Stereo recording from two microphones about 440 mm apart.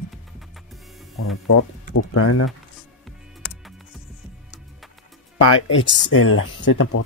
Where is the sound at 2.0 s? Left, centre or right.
Left.